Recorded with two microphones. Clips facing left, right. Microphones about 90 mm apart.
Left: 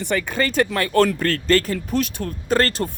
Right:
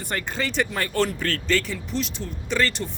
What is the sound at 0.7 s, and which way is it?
Speech, 70° left (ahead or behind).